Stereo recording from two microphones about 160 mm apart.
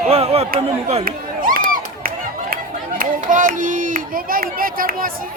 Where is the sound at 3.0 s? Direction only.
55° right (ahead or behind).